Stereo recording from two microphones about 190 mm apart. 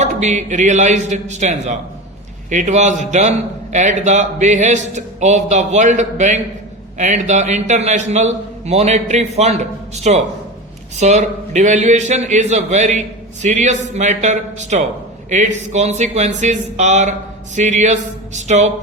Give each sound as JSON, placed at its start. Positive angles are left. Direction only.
{"t": 0.0, "sound": "a man's voice", "side_deg": -40}